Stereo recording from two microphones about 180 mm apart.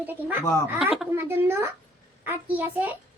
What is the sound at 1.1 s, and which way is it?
A child's voice, 15° right (ahead or behind).